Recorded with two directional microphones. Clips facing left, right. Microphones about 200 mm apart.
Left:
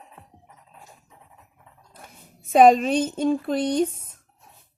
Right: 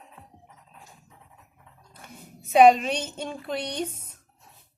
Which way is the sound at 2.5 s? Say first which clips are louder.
Left 2 dB; 45° left (ahead or behind).